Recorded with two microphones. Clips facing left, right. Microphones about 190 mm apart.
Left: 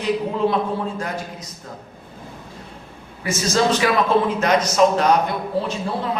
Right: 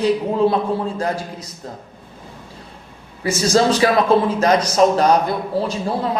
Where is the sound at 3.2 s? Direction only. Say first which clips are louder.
Right 4 dB; 35° right (ahead or behind).